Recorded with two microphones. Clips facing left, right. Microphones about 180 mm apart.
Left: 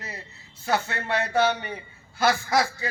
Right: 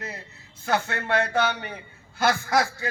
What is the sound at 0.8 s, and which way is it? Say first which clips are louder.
A man's voice: right 2 dB; 55° right (ahead or behind).